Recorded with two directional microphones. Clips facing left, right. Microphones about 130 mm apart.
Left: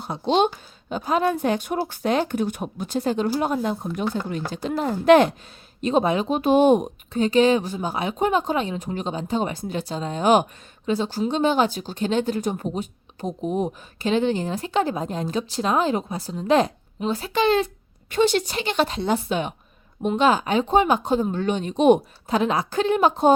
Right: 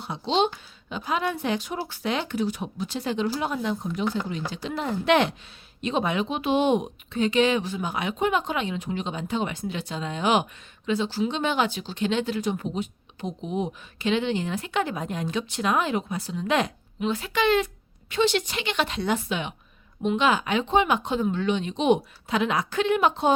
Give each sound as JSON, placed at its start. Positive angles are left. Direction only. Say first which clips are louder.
{"t": 0.0, "sound": "speech", "louder": "left 4 dB", "side_deg": 50}